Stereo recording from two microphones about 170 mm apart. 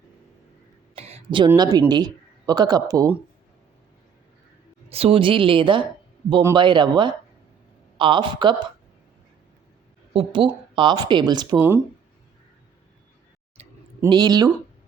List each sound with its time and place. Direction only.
0.9 s a sound: 35° right (ahead or behind)
1.5 s speech: 20° right (ahead or behind)
4.9 s a woman's voice: 35° right (ahead or behind)
10.1 s speech: 30° right (ahead or behind)
13.6 s a sound: 40° right (ahead or behind)
14.0 s speech: 25° right (ahead or behind)